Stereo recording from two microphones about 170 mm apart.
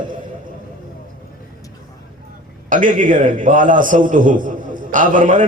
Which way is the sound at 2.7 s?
50° right (ahead or behind).